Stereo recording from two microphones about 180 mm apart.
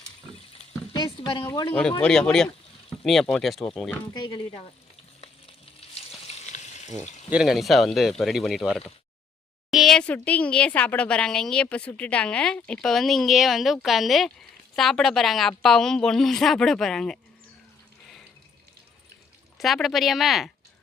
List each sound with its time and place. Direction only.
0.9 s a sound: 25° left (ahead or behind)
1.5 s speech: 15° left (ahead or behind)
4.1 s speech: 25° left (ahead or behind)
5.9 s frying: 35° left (ahead or behind)
7.0 s speech: 40° left (ahead or behind)
7.3 s speech: 5° right (ahead or behind)
19.5 s speech: centre (ahead or behind)